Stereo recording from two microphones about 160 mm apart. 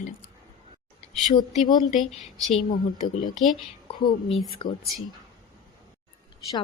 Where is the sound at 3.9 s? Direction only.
30° left (ahead or behind).